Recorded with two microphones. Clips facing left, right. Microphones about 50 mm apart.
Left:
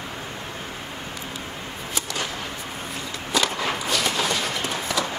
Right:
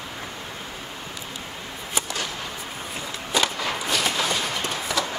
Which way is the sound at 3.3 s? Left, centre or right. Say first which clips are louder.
Even; centre.